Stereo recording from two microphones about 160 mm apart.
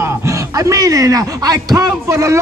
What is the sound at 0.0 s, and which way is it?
Speech, 20° right (ahead or behind).